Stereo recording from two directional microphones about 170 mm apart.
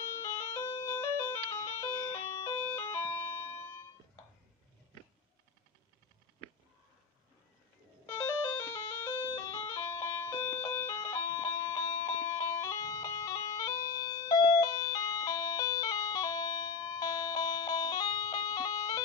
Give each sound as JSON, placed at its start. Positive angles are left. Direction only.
{"t": 0.2, "sound": "music", "side_deg": 15}
{"t": 8.1, "sound": "music", "side_deg": 15}
{"t": 12.3, "sound": "bagpipes", "side_deg": 15}